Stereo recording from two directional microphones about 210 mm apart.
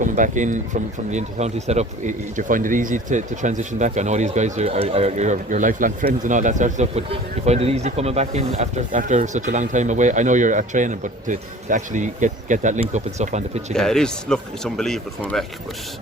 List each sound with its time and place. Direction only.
0.0 s speech: 35° right (ahead or behind)
13.7 s speech: 5° left (ahead or behind)